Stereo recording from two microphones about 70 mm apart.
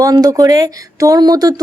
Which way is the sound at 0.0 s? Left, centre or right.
Right.